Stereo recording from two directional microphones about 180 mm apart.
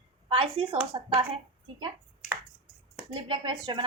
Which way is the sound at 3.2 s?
25° right (ahead or behind).